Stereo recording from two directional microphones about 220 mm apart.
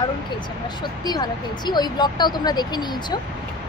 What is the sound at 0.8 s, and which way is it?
Speech, 20° left (ahead or behind).